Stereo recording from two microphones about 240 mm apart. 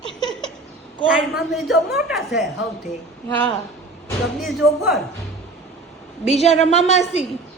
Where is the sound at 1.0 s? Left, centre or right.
Centre.